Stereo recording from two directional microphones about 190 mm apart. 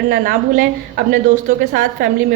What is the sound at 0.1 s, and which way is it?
A woman's voice, 55° right (ahead or behind).